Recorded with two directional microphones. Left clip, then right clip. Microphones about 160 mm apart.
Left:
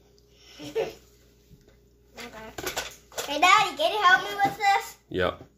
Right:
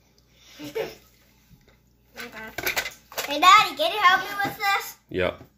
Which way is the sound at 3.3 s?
20° left (ahead or behind).